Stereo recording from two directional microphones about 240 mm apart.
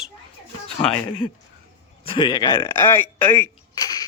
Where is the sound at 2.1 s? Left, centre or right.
Centre.